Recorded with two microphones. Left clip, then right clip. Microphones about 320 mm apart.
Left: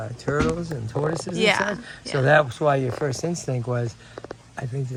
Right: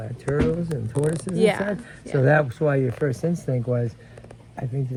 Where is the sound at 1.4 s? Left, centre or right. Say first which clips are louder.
Left 1 dB; left.